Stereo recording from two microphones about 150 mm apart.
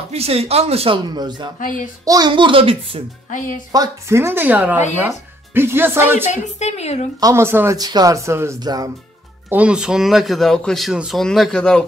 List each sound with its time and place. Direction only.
0.1 s speech: 45° right (ahead or behind)
1.6 s speech: 60° left (ahead or behind)
2.0 s speech: 25° right (ahead or behind)
3.7 s speech: 20° right (ahead or behind)
6.2 s a woman's voice: 50° left (ahead or behind)
7.2 s speech: 20° right (ahead or behind)
9.5 s speech: 10° right (ahead or behind)